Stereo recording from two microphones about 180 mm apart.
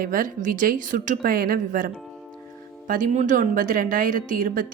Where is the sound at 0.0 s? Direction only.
50° right (ahead or behind).